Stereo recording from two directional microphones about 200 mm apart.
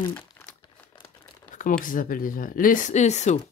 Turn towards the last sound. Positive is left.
turn(degrees=35)  # may be behind; listen again after turning